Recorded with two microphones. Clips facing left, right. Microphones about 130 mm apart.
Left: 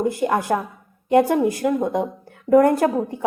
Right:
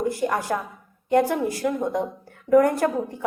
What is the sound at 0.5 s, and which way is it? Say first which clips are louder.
Speech: left 5 dB; 35° left (ahead or behind).